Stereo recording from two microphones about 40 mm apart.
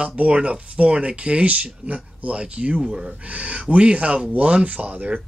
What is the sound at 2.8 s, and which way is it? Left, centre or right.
Speech, centre.